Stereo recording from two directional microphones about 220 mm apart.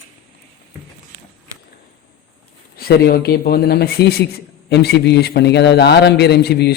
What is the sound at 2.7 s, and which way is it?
A man's voice, 45° left (ahead or behind).